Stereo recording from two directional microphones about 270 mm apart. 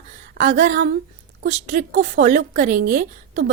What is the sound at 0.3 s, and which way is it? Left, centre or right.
A woman's voice, right.